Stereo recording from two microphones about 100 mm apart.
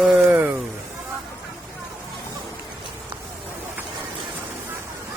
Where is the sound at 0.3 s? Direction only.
20° right (ahead or behind).